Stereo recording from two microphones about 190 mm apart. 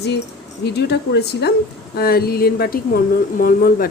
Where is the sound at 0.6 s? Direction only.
60° left (ahead or behind).